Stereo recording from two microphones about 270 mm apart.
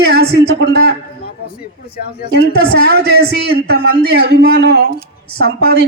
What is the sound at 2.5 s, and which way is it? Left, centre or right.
A man's voice, right.